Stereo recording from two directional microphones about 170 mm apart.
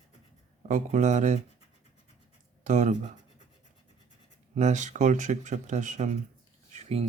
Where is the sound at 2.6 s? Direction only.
45° right (ahead or behind).